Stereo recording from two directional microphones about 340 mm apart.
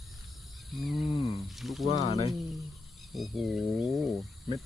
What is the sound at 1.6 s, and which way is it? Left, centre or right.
Pulleys, centre.